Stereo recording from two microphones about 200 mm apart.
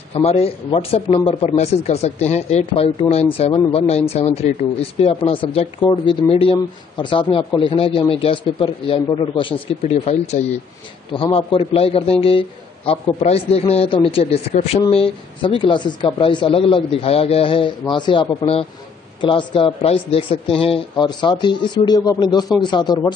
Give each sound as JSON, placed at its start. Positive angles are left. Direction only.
{"t": 0.1, "sound": "a man's voice", "side_deg": 30}